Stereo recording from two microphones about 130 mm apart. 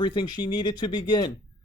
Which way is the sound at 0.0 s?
35° left (ahead or behind).